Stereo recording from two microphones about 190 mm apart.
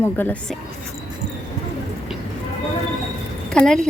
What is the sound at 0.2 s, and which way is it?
Speech, 10° left (ahead or behind).